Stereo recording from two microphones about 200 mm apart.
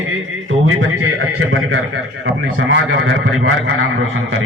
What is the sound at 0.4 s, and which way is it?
A man's voice, 80° right.